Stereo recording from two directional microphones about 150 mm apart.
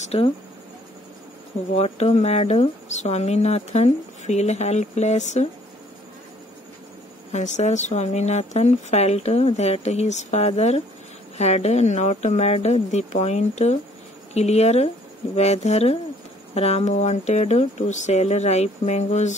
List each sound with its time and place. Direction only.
0.0 s speech: 45° left (ahead or behind)
1.8 s speech: 45° left (ahead or behind)
7.3 s speech: 50° left (ahead or behind)